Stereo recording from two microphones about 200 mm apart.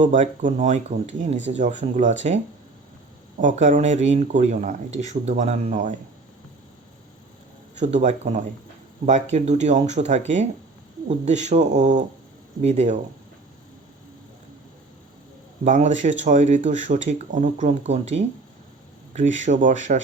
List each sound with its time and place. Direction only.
0.0 s speech: 40° right (ahead or behind)
7.8 s speech: 35° right (ahead or behind)
15.6 s speech: 40° right (ahead or behind)